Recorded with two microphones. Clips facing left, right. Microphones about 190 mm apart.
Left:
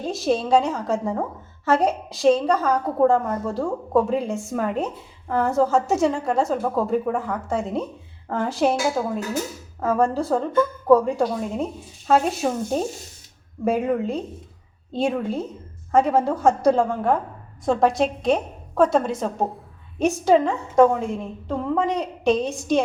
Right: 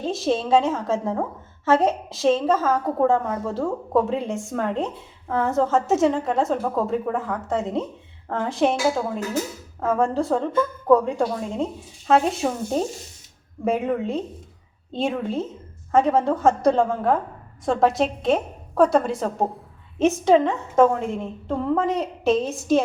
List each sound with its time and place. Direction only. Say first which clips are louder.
0.0 s a woman's voice: even; centre (ahead or behind)